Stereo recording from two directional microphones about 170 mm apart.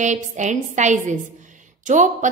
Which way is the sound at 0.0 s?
45° right (ahead or behind).